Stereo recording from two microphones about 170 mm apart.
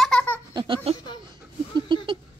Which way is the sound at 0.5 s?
25° right (ahead or behind).